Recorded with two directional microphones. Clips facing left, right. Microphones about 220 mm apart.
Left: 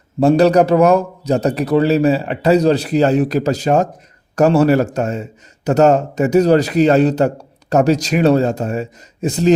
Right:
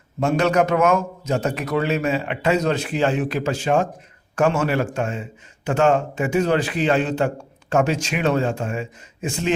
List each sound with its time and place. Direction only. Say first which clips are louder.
0.2 s a man's voice: left 8 dB; 35° left (ahead or behind)